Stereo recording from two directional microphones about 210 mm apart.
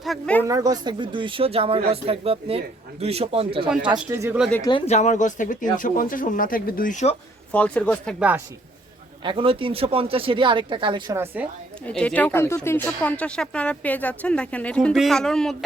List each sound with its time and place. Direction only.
0.0 s a woman's voice: 5° left (ahead or behind)
0.4 s speech: 15° right (ahead or behind)
3.9 s speech: 10° right (ahead or behind)
4.7 s speech: 30° left (ahead or behind)
7.5 s speech: 5° left (ahead or behind)
9.2 s speech: 25° right (ahead or behind)
11.9 s speech: 5° left (ahead or behind)